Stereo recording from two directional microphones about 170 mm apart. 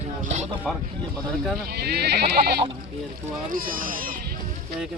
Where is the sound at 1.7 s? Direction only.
70° right (ahead or behind).